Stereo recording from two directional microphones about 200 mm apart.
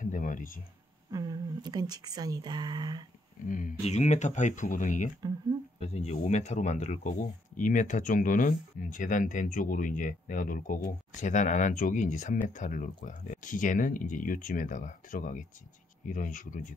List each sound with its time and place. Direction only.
0.0 s speech: 40° left (ahead or behind)
1.1 s speech: 15° right (ahead or behind)
3.4 s speech: 40° left (ahead or behind)